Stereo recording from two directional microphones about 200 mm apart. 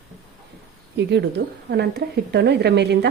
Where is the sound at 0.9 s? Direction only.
60° right (ahead or behind).